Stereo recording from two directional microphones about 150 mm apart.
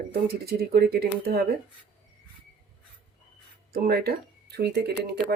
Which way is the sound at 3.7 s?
90° right.